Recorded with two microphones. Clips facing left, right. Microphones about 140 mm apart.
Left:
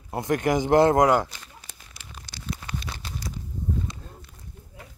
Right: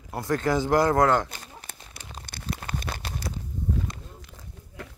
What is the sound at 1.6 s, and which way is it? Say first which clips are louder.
Crumpling: right 4 dB; 60° right (ahead or behind).